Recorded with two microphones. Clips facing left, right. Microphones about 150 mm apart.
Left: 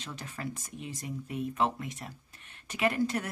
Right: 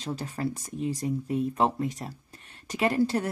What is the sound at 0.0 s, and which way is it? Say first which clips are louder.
Speech: right 8 dB; 35° right (ahead or behind).